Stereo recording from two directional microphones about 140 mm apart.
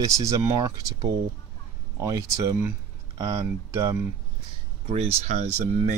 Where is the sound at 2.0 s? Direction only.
25° right (ahead or behind).